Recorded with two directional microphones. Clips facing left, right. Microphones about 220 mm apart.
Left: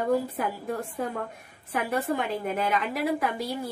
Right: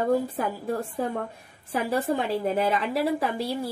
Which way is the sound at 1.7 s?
30° right (ahead or behind).